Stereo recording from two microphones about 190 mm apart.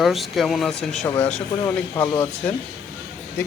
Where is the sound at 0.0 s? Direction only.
Centre (ahead or behind).